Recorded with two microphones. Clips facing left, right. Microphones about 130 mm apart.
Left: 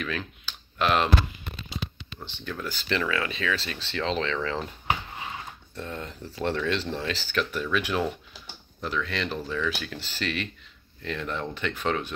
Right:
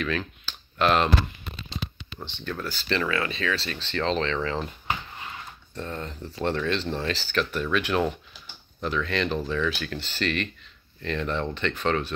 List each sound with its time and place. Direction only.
0.0 s speech: 10° left (ahead or behind)
2.6 s speech: 15° left (ahead or behind); by 4.7 s centre (ahead or behind)
5.8 s speech: 10° left (ahead or behind)